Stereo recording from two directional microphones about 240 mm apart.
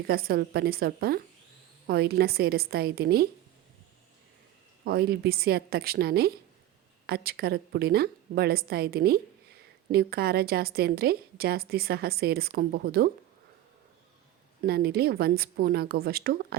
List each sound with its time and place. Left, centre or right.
0.1 s a woman's voice: right
4.9 s a woman's voice: right
14.6 s a woman's voice: right